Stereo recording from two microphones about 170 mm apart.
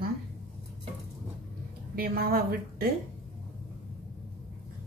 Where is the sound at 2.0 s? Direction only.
60° right (ahead or behind).